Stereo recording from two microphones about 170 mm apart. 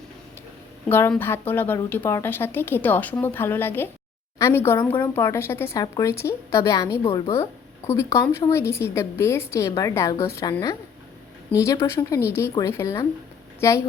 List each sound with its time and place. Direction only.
0.9 s a woman's voice: 15° left (ahead or behind)